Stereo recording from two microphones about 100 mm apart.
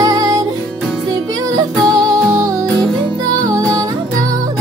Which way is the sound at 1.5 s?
40° right (ahead or behind).